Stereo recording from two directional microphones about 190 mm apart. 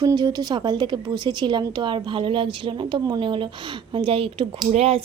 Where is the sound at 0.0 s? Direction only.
20° right (ahead or behind).